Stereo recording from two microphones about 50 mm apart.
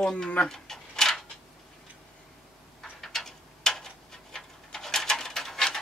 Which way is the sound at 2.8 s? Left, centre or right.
Centre.